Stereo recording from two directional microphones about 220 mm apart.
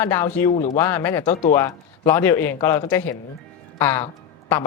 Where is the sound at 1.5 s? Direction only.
15° left (ahead or behind).